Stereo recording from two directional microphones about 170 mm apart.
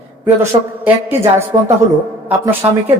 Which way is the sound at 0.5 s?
30° right (ahead or behind).